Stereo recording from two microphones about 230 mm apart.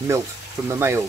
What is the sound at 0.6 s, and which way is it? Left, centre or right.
Speech, centre.